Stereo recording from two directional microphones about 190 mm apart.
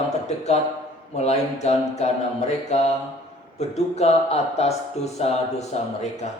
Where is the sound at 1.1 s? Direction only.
35° left (ahead or behind).